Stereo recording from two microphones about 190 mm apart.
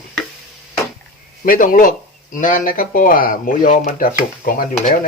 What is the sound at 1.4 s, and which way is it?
Speech, 45° left (ahead or behind).